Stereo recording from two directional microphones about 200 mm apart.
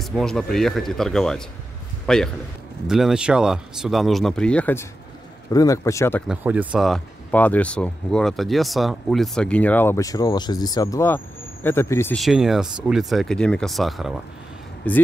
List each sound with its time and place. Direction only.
0.0 s a man's voice: 5° left (ahead or behind)
6.2 s a man's voice: 5° right (ahead or behind); by 12.2 s 10° left (ahead or behind)
12.2 s a man's voice: centre (ahead or behind)